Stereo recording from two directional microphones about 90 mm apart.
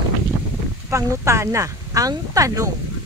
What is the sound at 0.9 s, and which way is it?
Speech, 30° right (ahead or behind).